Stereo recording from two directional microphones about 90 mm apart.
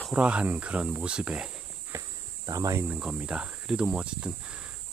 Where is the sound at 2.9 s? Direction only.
10° right (ahead or behind).